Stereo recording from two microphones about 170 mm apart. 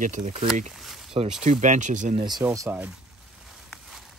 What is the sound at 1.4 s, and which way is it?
Speech, 45° right (ahead or behind).